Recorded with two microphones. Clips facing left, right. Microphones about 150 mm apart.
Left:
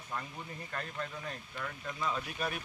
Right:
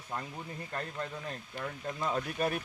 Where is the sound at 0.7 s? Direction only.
30° right (ahead or behind).